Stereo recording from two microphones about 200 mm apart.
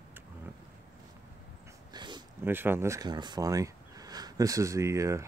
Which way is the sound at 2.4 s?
10° right (ahead or behind).